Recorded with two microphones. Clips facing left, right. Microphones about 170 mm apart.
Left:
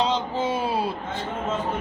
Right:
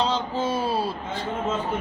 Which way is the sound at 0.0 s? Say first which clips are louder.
Left 1 dB; 20° left (ahead or behind).